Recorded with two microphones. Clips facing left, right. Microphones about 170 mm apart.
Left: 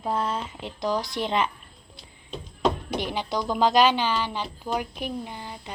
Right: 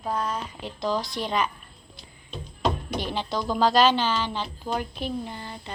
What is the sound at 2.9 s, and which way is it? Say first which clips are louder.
Speech: left 1 dB; 15° left (ahead or behind).